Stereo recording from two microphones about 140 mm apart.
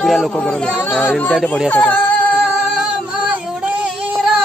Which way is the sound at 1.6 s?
10° left (ahead or behind).